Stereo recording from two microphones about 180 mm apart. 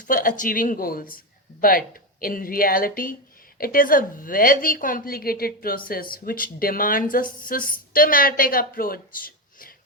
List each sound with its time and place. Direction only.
0.1 s a woman's voice: 50° left (ahead or behind)